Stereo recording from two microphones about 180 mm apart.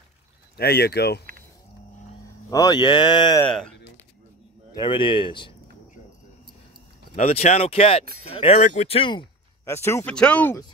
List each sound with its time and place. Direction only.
0.6 s speech: 60° left (ahead or behind)
2.5 s speech: 25° left (ahead or behind)
3.4 s speech: 5° left (ahead or behind)
4.7 s speech: 25° left (ahead or behind)
7.2 s speech: 35° left (ahead or behind)
9.7 s speech: 15° left (ahead or behind)